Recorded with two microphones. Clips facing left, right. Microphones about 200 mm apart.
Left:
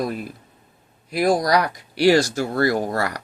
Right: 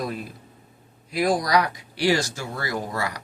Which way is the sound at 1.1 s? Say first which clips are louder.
Left 3 dB; 45° left (ahead or behind).